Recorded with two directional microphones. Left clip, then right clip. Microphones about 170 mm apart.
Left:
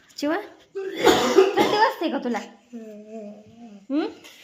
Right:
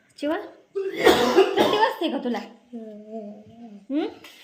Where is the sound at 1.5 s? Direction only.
10° left (ahead or behind).